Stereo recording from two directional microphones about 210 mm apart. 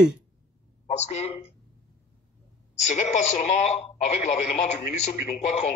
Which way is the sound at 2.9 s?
35° left (ahead or behind).